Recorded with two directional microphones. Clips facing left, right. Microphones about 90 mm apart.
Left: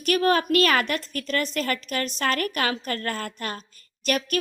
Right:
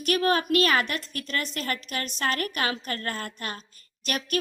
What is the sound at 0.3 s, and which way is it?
A woman's voice, 45° left (ahead or behind).